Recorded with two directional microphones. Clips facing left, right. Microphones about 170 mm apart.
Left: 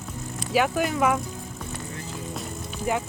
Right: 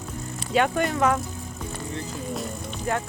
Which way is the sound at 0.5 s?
5° left (ahead or behind).